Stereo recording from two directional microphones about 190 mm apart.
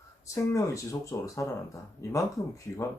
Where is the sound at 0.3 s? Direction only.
15° left (ahead or behind).